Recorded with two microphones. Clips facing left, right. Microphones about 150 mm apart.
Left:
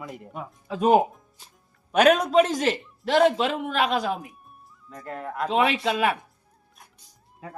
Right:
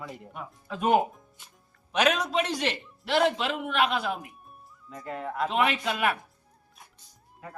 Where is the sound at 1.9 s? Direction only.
50° left (ahead or behind).